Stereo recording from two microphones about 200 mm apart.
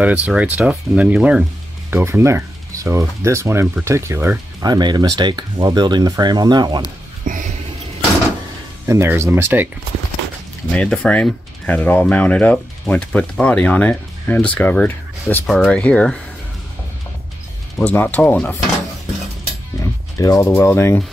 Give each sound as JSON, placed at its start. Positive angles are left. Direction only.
{"t": 0.0, "sound": "speech", "side_deg": -5}
{"t": 7.2, "sound": "a sound", "side_deg": -40}
{"t": 8.8, "sound": "speech", "side_deg": -15}
{"t": 10.7, "sound": "speech", "side_deg": 5}
{"t": 17.7, "sound": "speech", "side_deg": 10}
{"t": 19.8, "sound": "speech", "side_deg": 15}